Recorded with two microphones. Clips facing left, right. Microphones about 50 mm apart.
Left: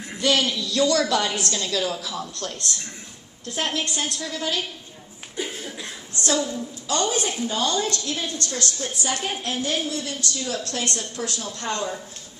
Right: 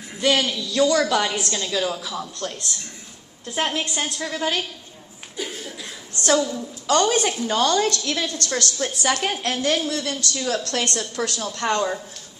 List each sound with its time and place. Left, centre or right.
0.2 s a woman's voice: right
3.5 s a woman's voice: right
6.1 s a woman's voice: right
8.0 s a woman's voice: right
8.8 s a woman's voice: right